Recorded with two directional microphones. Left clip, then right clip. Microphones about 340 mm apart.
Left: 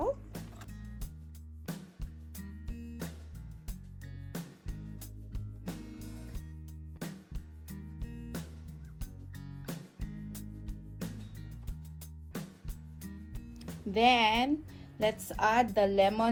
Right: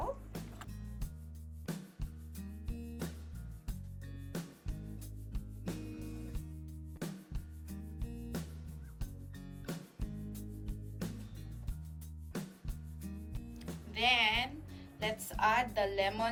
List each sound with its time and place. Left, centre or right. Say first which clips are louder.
0.3 s music: even; centre
4.3 s music: even; centre
7.0 s music: left 1 dB; centre
8.0 s music: right 1 dB; centre
9.6 s music: even; centre
12.3 s music: even; centre
13.9 s speech: left 5 dB; centre